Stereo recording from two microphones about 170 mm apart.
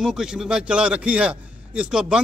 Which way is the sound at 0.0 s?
5° right (ahead or behind).